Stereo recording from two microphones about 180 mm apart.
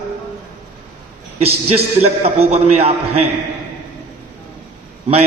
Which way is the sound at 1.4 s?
35° right (ahead or behind).